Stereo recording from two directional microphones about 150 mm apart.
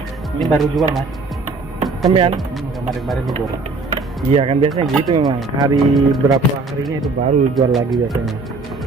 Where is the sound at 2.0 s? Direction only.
35° right (ahead or behind).